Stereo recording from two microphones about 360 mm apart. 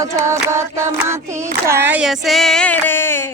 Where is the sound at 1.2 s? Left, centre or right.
Centre.